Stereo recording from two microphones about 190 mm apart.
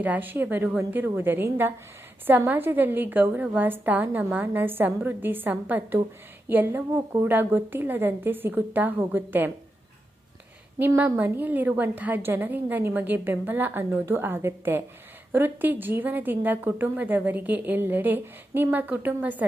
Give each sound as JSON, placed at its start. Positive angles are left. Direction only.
{"t": 0.0, "sound": "a woman's voice", "side_deg": -10}
{"t": 10.8, "sound": "a woman's voice", "side_deg": -10}